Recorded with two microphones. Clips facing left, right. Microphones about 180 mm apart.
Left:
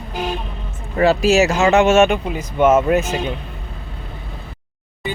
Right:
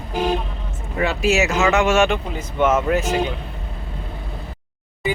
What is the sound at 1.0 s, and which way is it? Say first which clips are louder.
Speech: left 5 dB; 35° left (ahead or behind).